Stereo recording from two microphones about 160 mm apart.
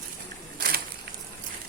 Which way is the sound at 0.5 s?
70° right (ahead or behind).